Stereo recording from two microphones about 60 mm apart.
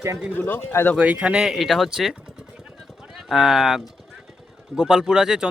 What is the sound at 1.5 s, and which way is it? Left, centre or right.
Speech, centre.